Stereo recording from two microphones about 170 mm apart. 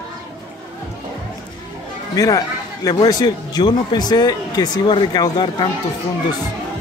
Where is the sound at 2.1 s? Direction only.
20° left (ahead or behind).